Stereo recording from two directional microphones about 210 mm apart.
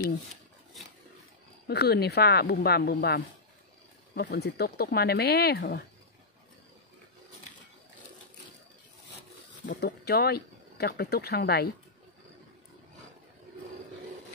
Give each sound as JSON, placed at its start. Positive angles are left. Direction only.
{"t": 1.7, "sound": "speech", "side_deg": 50}
{"t": 9.8, "sound": "speech", "side_deg": 50}